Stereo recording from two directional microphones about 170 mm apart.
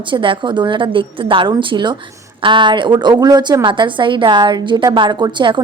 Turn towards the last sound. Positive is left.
turn(degrees=-30)  # may be behind; listen again after turning